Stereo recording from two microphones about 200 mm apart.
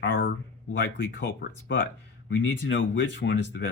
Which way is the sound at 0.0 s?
65° left (ahead or behind).